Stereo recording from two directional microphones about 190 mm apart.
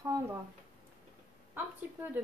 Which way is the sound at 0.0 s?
15° right (ahead or behind).